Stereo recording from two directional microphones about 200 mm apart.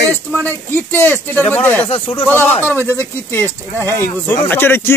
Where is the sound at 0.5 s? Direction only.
10° left (ahead or behind).